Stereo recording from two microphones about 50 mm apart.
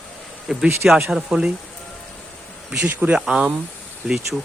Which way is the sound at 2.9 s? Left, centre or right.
Right.